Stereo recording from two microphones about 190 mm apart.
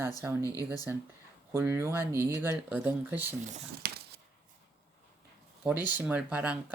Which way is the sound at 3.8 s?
55° right (ahead or behind).